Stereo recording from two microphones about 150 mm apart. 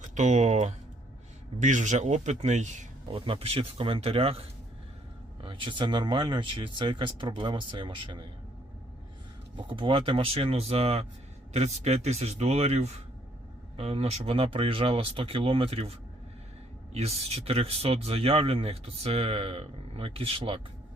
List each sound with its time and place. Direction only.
0.0 s a man's voice: 55° right (ahead or behind)
3.1 s speech: 35° right (ahead or behind)
9.6 s a man's voice: 35° right (ahead or behind)